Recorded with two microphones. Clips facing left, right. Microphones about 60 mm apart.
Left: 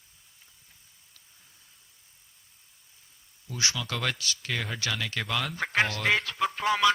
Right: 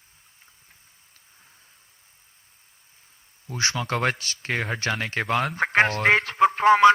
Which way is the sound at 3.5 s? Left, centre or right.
Right.